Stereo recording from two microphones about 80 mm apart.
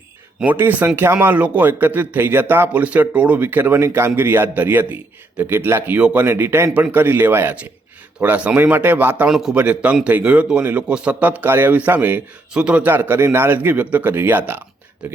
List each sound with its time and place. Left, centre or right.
0.4 s speech: right
9.3 s a man's voice: centre
9.6 s a man's voice: centre